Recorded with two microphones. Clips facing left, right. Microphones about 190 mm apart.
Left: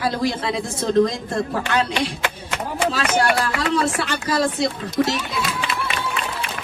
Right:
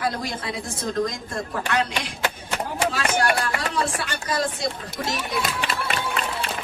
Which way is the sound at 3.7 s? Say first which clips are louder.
Left 5 dB; 25° left (ahead or behind).